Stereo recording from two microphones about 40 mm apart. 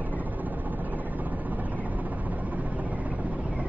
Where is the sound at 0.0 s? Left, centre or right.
Right.